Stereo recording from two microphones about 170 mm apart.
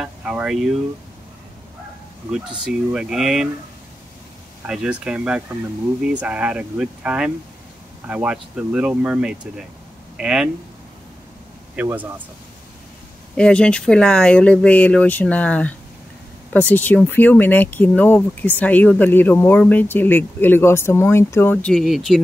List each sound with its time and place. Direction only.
0.0 s speech: 5° right (ahead or behind)
2.3 s speech: 5° right (ahead or behind)
4.6 s speech: 5° right (ahead or behind)
11.7 s speech: 10° right (ahead or behind)
13.4 s speech: 5° left (ahead or behind)